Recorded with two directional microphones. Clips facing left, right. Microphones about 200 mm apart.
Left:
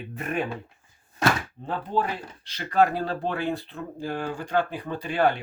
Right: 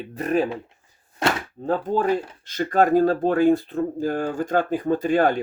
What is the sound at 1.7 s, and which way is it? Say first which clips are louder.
Speech: right 7 dB; 45° right (ahead or behind).